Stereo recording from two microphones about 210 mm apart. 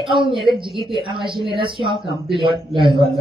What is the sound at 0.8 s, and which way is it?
A man's voice, 25° right (ahead or behind).